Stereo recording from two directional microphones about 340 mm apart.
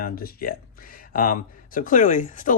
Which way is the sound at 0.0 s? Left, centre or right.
Left.